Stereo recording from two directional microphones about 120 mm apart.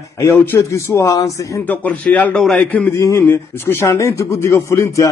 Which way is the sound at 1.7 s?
10° left (ahead or behind).